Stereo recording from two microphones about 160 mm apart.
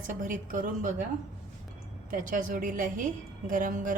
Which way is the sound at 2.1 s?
60° right (ahead or behind).